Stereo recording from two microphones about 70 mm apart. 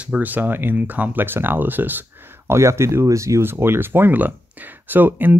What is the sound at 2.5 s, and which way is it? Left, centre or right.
Speech, right.